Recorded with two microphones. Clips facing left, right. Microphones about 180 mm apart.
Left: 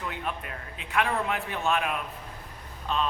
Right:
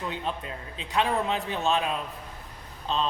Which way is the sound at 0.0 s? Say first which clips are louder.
Right 2 dB; 25° right (ahead or behind).